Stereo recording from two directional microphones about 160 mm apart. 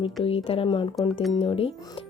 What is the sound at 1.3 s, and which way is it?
Speech, 35° left (ahead or behind).